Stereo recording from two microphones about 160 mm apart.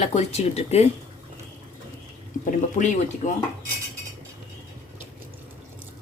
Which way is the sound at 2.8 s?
50° left (ahead or behind).